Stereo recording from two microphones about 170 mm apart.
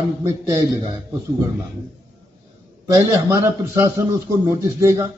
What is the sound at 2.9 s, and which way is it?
A man's voice, 15° right (ahead or behind).